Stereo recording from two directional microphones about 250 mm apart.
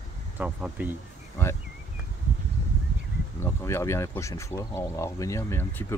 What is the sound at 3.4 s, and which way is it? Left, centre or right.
Speech, centre.